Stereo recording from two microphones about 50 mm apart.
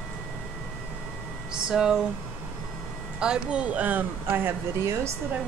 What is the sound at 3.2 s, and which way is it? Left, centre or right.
Speech, centre.